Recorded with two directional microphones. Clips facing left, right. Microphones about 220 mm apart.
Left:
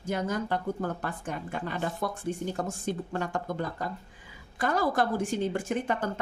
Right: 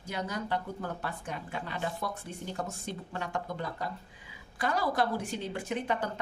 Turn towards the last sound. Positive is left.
turn(degrees=50)  # may be behind; listen again after turning